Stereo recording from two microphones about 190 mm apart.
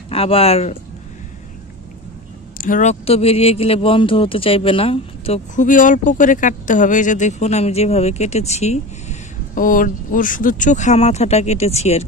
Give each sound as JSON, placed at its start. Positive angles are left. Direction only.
{"t": 0.1, "sound": "speech", "side_deg": 30}
{"t": 2.6, "sound": "speech", "side_deg": 40}
{"t": 5.7, "sound": "speech", "side_deg": 45}